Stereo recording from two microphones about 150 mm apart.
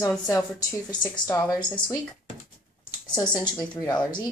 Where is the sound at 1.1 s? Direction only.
25° left (ahead or behind).